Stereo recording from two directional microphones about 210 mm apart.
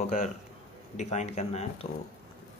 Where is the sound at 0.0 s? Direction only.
35° left (ahead or behind).